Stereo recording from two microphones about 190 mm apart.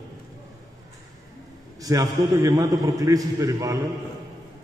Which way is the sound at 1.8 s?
20° right (ahead or behind).